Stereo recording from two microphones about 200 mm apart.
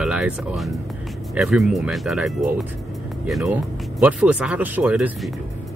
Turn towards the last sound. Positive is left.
turn(degrees=-5)  # may be behind; listen again after turning